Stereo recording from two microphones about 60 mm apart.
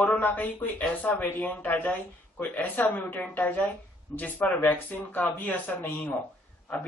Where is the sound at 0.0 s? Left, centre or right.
Left.